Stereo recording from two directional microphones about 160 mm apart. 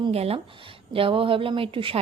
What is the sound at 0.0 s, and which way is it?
Speech, 40° right (ahead or behind).